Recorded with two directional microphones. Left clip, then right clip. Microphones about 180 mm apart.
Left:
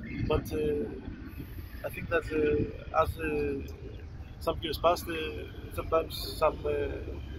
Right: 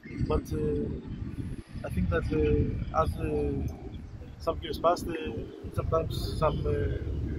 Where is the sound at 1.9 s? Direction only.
15° left (ahead or behind).